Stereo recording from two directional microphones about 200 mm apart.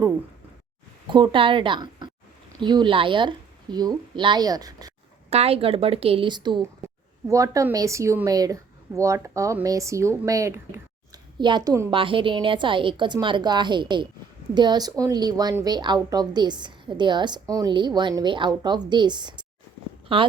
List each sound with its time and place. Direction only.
1.1 s a woman's voice: 25° right (ahead or behind)
5.3 s a woman's voice: 30° right (ahead or behind)